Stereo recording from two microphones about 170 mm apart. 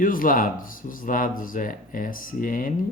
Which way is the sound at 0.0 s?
55° left (ahead or behind).